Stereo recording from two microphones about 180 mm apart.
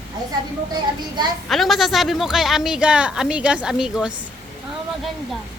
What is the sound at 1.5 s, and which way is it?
A woman's voice, centre (ahead or behind).